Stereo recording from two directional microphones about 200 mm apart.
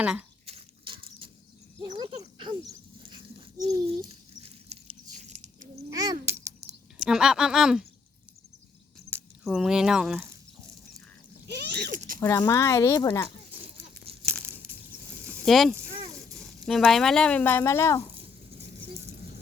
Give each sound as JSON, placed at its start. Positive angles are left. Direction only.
{"t": 0.0, "sound": "speech", "side_deg": -5}
{"t": 0.4, "sound": "a sound", "side_deg": -30}
{"t": 2.0, "sound": "dog", "side_deg": -25}
{"t": 3.7, "sound": "patter", "side_deg": -30}
{"t": 5.1, "sound": "biting", "side_deg": -35}
{"t": 5.9, "sound": "a sound", "side_deg": -20}
{"t": 7.0, "sound": "speech", "side_deg": -5}
{"t": 9.0, "sound": "speech", "side_deg": 5}
{"t": 11.4, "sound": "zipper", "side_deg": -55}
{"t": 12.2, "sound": "speech", "side_deg": 15}
{"t": 14.0, "sound": "tearing", "side_deg": -30}
{"t": 15.3, "sound": "a sound", "side_deg": 0}
{"t": 16.3, "sound": "speech", "side_deg": 0}